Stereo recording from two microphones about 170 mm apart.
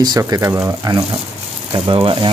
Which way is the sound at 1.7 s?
30° right (ahead or behind).